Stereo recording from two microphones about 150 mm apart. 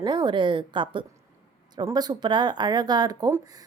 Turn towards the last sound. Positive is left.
turn(degrees=-25)  # may be behind; listen again after turning